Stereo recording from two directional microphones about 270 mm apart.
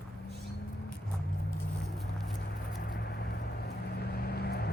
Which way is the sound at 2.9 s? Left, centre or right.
Left.